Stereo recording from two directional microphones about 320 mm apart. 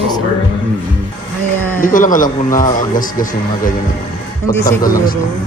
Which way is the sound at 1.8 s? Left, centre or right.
Left.